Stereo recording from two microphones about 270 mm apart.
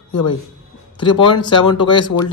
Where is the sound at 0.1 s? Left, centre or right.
Left.